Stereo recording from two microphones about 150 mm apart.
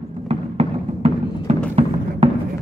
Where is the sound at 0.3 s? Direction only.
45° right (ahead or behind).